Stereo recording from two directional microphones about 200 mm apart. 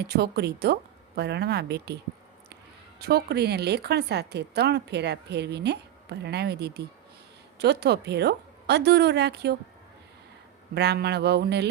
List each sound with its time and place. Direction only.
0.0 s speech: 55° right (ahead or behind)
3.0 s speech: 50° right (ahead or behind)
10.8 s speech: 55° right (ahead or behind)